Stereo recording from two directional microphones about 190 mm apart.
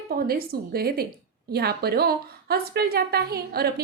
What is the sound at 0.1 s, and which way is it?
A woman's voice, 55° right (ahead or behind).